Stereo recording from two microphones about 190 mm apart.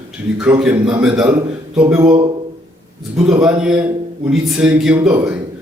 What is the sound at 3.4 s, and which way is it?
A man's voice, 5° right (ahead or behind).